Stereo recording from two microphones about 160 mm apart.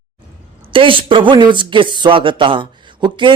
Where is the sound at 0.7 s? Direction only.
30° right (ahead or behind).